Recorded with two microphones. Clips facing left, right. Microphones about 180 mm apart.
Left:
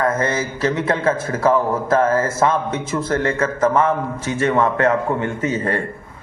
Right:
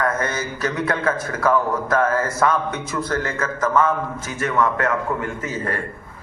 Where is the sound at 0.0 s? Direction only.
25° left (ahead or behind).